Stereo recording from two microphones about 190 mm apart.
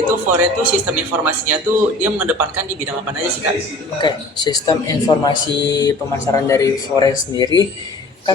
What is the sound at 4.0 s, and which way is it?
Speech, 20° left (ahead or behind).